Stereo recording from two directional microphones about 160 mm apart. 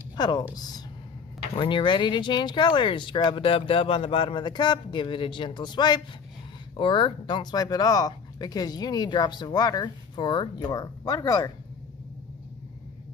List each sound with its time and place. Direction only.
0.2 s speech: 25° left (ahead or behind)